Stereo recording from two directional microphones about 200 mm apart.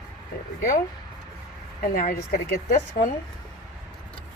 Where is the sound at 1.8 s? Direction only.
45° left (ahead or behind).